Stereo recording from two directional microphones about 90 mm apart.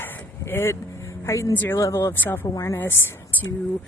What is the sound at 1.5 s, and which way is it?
Speech, 20° left (ahead or behind).